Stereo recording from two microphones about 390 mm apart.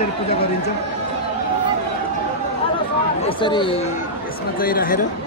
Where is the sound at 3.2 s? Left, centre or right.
Centre.